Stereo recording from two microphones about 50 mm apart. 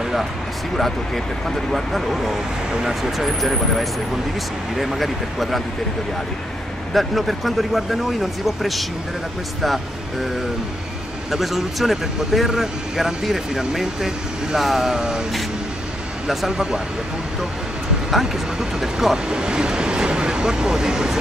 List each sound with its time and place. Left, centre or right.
0.0 s a sound: centre
0.7 s speech: centre
6.9 s speech: centre
11.2 s speech: centre
16.3 s speech: centre
18.1 s speech: centre